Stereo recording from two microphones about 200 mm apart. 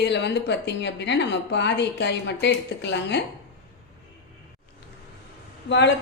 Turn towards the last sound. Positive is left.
turn(degrees=60)  # may be behind; listen again after turning